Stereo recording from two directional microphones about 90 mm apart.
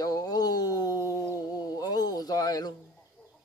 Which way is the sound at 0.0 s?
45° left (ahead or behind).